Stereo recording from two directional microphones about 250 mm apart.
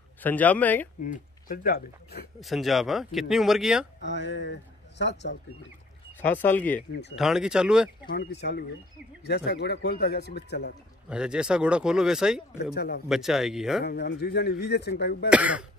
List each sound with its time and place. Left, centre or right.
0.2 s speech: centre
1.0 s speech: left
2.4 s speech: centre
4.0 s speech: left
6.2 s speech: centre
8.1 s speech: left
11.1 s speech: centre
12.7 s speech: left
13.1 s speech: centre
13.8 s speech: left
15.2 s speech: centre